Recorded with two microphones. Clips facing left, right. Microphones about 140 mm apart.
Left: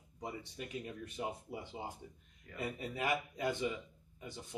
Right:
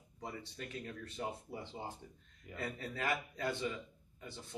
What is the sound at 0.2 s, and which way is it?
Speech, 15° left (ahead or behind).